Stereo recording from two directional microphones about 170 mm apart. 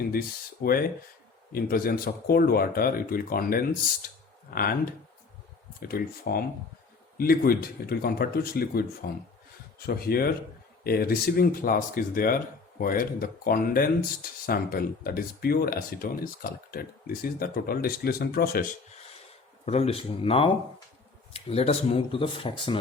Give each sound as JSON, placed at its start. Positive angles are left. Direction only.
{"t": 0.6, "sound": "speech", "side_deg": 65}
{"t": 5.8, "sound": "speech", "side_deg": 60}
{"t": 19.6, "sound": "speech", "side_deg": 40}